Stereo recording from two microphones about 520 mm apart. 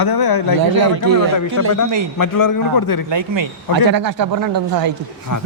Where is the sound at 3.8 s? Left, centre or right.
Right.